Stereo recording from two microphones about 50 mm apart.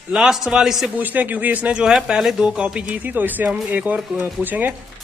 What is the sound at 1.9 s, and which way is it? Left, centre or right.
Speech, centre.